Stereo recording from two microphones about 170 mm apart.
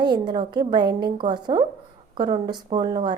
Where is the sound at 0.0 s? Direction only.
25° right (ahead or behind).